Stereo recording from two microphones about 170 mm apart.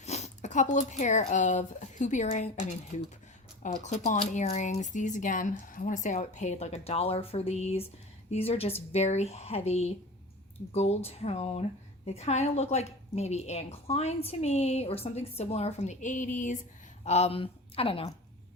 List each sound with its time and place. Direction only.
0.0 s a woman's voice: 40° left (ahead or behind)